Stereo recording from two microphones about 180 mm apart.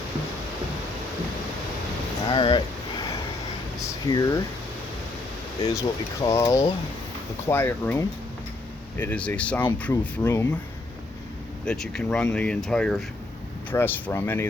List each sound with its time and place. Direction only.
2.3 s speech: 30° left (ahead or behind)
3.8 s a sound: 20° left (ahead or behind)
5.6 s speech: 20° left (ahead or behind)
11.6 s speech: 5° left (ahead or behind)